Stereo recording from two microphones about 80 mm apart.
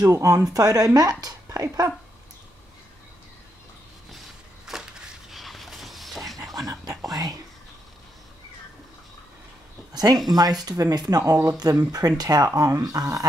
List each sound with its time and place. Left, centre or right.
0.0 s a woman's voice: right
4.6 s a sound: centre
6.5 s whispering: right
9.9 s speech: right